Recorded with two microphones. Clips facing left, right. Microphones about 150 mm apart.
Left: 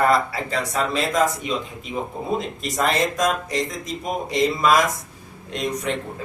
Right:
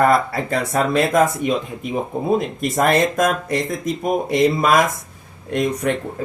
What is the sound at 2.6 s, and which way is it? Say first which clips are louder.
Speech: right 4 dB; 55° right (ahead or behind).